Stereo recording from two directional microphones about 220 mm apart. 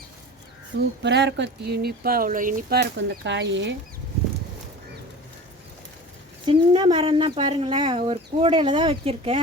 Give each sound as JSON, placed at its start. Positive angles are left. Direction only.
{"t": 1.0, "sound": "speech", "side_deg": -55}
{"t": 6.4, "sound": "speech", "side_deg": -20}